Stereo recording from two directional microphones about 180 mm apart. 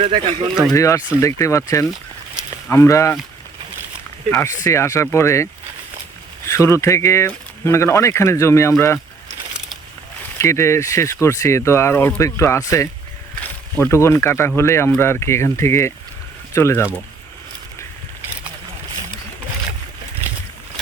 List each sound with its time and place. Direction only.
0.0 s speech: 30° right (ahead or behind)
0.7 s speech: 15° left (ahead or behind)
4.3 s speech: 10° left (ahead or behind)
10.3 s speech: 15° left (ahead or behind)